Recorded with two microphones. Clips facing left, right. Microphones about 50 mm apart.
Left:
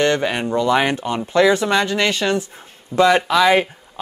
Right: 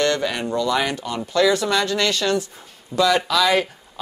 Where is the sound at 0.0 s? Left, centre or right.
Left.